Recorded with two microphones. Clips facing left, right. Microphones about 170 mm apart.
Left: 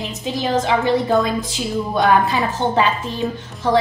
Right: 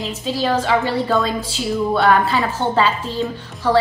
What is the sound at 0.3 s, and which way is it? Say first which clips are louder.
A woman's voice: right 1 dB; 20° left (ahead or behind).